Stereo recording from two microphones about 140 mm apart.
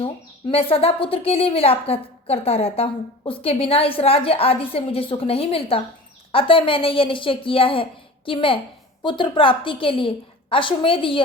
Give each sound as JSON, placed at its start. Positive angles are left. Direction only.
{"t": 0.0, "sound": "a woman's voice", "side_deg": 40}